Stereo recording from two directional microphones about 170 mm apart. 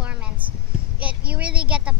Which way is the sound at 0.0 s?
5° right (ahead or behind).